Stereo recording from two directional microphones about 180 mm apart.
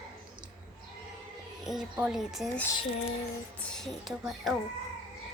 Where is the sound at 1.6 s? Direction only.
Centre (ahead or behind).